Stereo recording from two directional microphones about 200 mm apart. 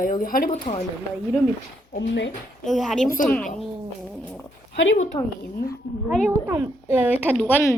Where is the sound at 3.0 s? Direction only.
45° left (ahead or behind).